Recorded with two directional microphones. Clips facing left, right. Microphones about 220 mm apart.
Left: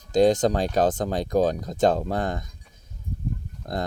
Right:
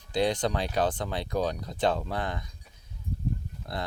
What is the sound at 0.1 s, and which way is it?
Speech, 45° left (ahead or behind).